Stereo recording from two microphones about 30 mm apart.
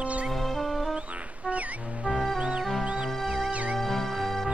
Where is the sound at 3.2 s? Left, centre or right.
Right.